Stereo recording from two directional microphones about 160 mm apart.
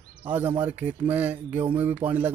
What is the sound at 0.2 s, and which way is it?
Speech, 10° right (ahead or behind).